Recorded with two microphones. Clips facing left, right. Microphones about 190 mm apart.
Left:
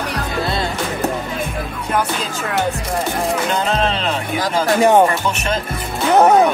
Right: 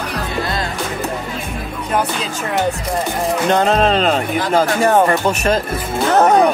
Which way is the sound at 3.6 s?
40° right (ahead or behind).